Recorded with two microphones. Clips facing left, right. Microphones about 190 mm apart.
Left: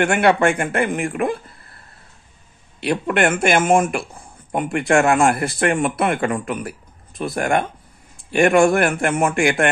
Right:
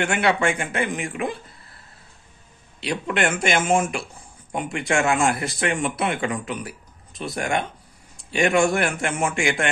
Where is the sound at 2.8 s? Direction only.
55° left (ahead or behind).